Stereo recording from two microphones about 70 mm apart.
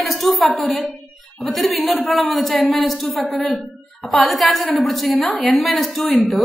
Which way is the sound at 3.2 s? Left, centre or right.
Centre.